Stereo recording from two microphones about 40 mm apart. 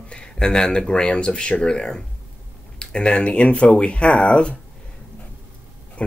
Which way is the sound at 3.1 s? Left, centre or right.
Left.